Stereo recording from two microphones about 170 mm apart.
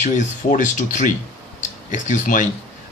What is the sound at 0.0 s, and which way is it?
Speech, 45° left (ahead or behind).